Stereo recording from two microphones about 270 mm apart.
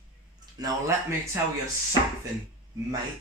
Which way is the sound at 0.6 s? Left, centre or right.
Centre.